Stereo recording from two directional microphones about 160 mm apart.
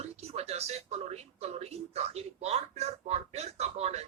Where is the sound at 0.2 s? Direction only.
40° right (ahead or behind).